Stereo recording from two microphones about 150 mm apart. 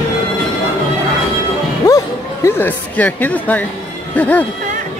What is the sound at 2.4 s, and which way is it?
Speech, 15° left (ahead or behind).